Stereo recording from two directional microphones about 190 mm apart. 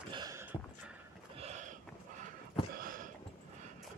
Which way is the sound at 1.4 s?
40° right (ahead or behind).